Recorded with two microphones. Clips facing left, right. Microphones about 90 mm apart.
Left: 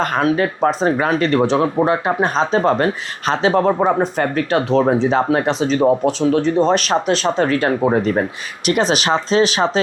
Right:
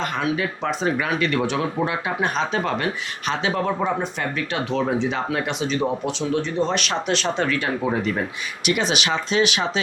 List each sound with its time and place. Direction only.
0.0 s speech: 45° left (ahead or behind)